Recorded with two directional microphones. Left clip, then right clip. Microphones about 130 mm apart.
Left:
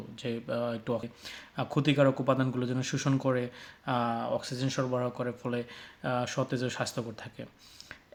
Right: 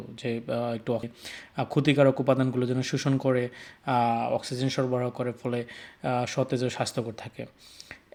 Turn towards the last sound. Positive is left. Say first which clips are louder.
# right 5 dB
turn(degrees=-35)  # may be behind; listen again after turning